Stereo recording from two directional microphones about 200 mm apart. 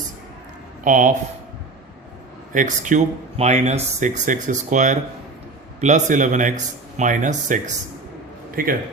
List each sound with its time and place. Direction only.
0.9 s speech: 40° right (ahead or behind)
2.5 s a man's voice: 40° right (ahead or behind)